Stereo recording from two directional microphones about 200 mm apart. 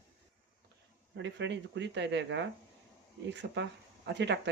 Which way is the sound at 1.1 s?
65° right (ahead or behind).